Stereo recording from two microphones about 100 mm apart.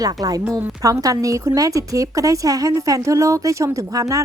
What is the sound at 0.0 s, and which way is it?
A woman's voice, 40° right (ahead or behind).